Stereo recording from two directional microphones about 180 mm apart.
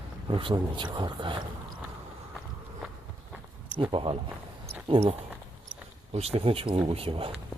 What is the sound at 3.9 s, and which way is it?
Speech, 30° right (ahead or behind).